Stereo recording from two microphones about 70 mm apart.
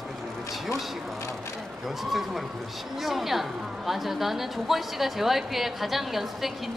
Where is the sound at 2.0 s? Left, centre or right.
Centre.